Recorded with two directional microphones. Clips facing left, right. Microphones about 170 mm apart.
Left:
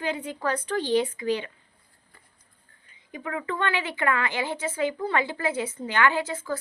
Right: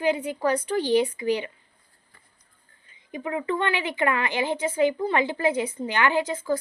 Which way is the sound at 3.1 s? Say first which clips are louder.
Right 4 dB; 20° right (ahead or behind).